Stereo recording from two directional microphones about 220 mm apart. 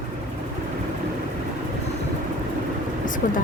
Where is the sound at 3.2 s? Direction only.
40° left (ahead or behind).